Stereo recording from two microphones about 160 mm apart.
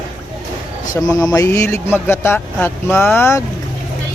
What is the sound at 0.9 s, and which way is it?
Speech, 20° left (ahead or behind).